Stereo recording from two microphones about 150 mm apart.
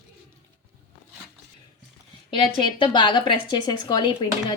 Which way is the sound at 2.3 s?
35° left (ahead or behind).